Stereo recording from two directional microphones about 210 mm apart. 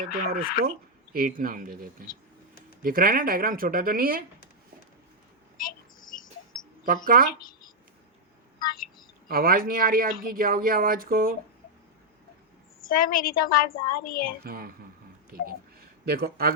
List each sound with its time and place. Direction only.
0.3 s speech: 45° right (ahead or behind)
5.5 s a sound: 40° left (ahead or behind)
6.8 s speech: 40° right (ahead or behind)
9.3 s speech: 45° right (ahead or behind)
12.8 s a woman's voice: 40° left (ahead or behind)
14.4 s speech: 45° right (ahead or behind)
16.0 s speech: 50° right (ahead or behind)